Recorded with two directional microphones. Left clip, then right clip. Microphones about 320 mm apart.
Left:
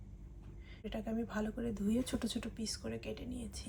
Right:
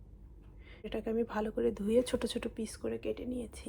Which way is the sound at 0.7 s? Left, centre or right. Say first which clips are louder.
Right 6 dB; right.